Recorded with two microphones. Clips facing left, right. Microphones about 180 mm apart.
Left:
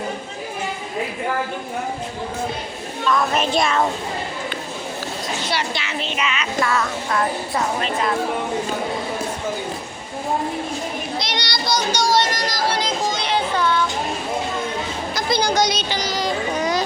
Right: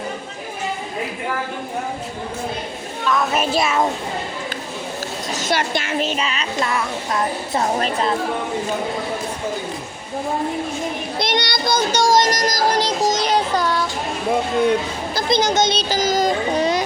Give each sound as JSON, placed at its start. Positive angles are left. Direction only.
{"t": 3.1, "sound": "speech", "side_deg": -5}
{"t": 5.3, "sound": "child singing", "side_deg": -45}
{"t": 6.6, "sound": "music", "side_deg": -20}
{"t": 7.6, "sound": "a woman's voice", "side_deg": -40}
{"t": 11.2, "sound": "child singing", "side_deg": -50}
{"t": 15.1, "sound": "music", "side_deg": -20}
{"t": 15.9, "sound": "child singing", "side_deg": -45}
{"t": 16.6, "sound": "a sound", "side_deg": -25}